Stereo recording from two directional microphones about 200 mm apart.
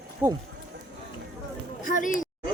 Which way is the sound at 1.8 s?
40° left (ahead or behind).